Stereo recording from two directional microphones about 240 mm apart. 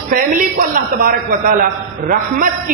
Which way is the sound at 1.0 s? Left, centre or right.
Right.